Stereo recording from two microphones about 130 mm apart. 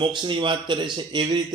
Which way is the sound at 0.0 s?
40° right (ahead or behind).